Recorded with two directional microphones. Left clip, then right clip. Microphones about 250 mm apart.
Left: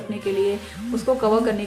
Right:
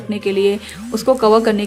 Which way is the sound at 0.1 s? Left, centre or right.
Right.